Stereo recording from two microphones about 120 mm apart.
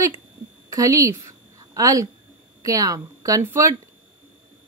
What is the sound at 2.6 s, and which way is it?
A woman's voice, 30° right (ahead or behind).